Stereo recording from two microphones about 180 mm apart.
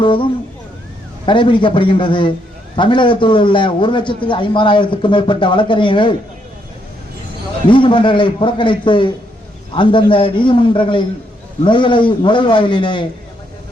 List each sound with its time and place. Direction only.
0.0 s a man's voice: 30° left (ahead or behind)
7.7 s a man's voice: 25° left (ahead or behind)